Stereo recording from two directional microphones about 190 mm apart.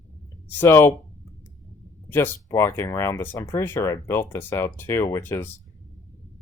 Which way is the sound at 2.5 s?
15° left (ahead or behind).